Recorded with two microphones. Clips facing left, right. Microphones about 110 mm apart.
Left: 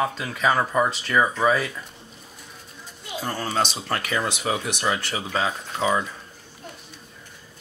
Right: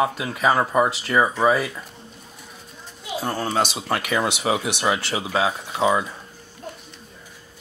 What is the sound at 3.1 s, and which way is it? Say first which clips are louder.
Speech: right 2 dB; 5° right (ahead or behind).